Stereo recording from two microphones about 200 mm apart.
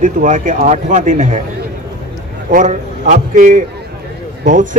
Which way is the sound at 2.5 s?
40° right (ahead or behind).